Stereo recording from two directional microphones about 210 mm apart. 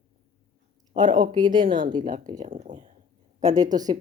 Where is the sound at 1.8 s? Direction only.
40° right (ahead or behind).